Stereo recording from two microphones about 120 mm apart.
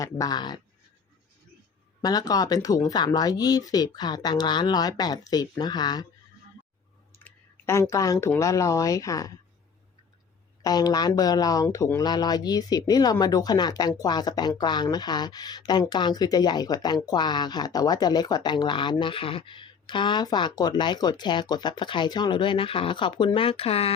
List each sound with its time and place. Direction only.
0.0 s speech: 30° left (ahead or behind)
2.0 s speech: 35° left (ahead or behind)
7.3 s a sound: 20° left (ahead or behind)
8.4 s speech: 25° left (ahead or behind)
10.6 s speech: 35° left (ahead or behind)
12.0 s speech: 35° left (ahead or behind); by 23.9 s 55° left (ahead or behind)